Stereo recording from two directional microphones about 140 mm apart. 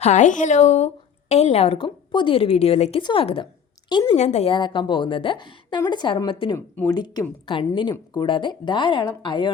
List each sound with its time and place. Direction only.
0.0 s a woman's voice: 60° left (ahead or behind)
3.0 s a woman's voice: 35° left (ahead or behind)
4.1 s a woman's voice: 50° left (ahead or behind)
4.5 s a woman's voice: 35° left (ahead or behind)